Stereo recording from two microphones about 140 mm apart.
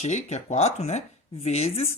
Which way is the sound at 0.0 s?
55° left (ahead or behind).